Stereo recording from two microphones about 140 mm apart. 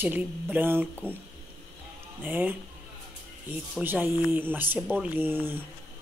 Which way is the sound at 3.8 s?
15° right (ahead or behind).